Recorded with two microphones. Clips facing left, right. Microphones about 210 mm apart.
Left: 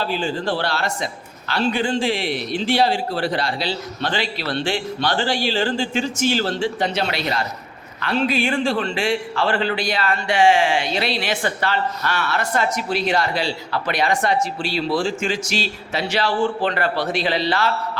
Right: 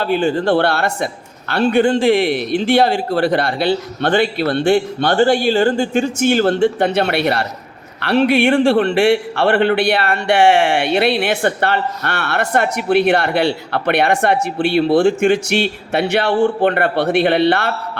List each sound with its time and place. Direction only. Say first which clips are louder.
0.0 s speech: right 7 dB; 60° right (ahead or behind)